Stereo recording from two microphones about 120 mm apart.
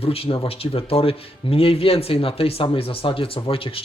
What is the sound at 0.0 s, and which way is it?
Speech, 55° left (ahead or behind).